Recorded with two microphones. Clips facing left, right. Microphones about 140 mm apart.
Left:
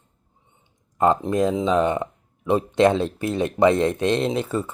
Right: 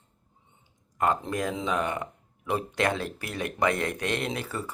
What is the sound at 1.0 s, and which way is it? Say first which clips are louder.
Speech: left 8 dB; 25° left (ahead or behind).